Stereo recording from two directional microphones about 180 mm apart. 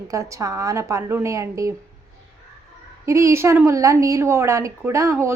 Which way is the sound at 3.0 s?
15° right (ahead or behind).